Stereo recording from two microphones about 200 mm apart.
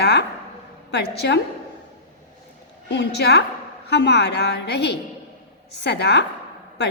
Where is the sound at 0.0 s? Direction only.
55° left (ahead or behind).